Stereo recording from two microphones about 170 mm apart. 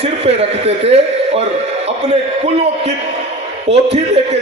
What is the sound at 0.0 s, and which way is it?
A man's voice, 35° right (ahead or behind).